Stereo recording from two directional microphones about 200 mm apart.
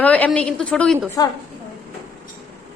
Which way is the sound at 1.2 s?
15° left (ahead or behind).